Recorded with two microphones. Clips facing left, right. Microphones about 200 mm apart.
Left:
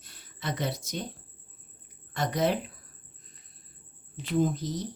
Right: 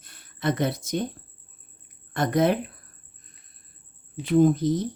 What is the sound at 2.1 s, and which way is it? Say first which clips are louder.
Speech: right 5 dB; 55° right (ahead or behind).